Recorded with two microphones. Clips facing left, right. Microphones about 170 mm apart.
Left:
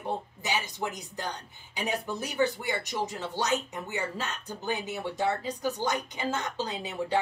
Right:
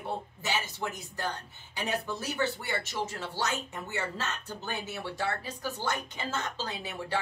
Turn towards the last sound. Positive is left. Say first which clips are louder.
# left 4 dB
turn(degrees=20)  # may be behind; listen again after turning